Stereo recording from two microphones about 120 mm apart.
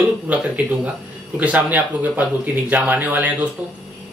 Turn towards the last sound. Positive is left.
turn(degrees=-15)  # may be behind; listen again after turning